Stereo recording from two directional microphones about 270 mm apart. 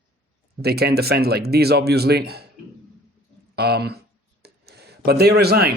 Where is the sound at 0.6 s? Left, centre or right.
Right.